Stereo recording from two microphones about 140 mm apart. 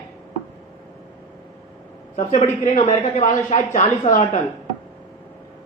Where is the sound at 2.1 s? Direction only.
55° left (ahead or behind).